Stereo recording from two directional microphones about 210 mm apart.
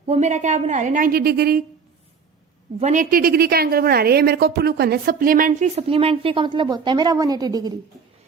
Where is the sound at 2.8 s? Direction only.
35° right (ahead or behind).